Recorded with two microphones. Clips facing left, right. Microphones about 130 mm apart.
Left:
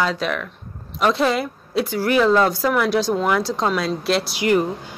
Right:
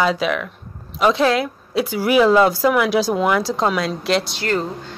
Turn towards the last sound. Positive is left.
turn(degrees=5)  # may be behind; listen again after turning